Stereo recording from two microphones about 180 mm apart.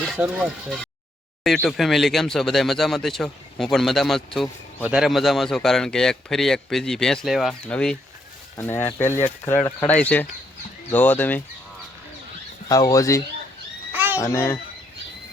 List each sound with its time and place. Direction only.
0.0 s a man's voice: 5° right (ahead or behind)
12.6 s speech: 20° left (ahead or behind)
13.9 s a sound: 10° right (ahead or behind)
14.2 s speech: 15° left (ahead or behind)